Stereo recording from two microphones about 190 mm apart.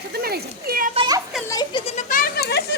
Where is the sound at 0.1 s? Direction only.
55° right (ahead or behind).